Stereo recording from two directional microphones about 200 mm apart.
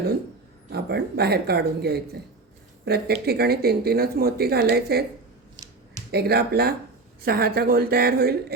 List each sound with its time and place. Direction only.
0.7 s speech: 50° right (ahead or behind)
6.1 s speech: 55° right (ahead or behind)